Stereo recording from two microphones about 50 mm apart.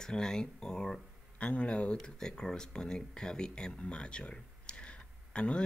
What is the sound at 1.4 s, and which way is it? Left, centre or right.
Speech, left.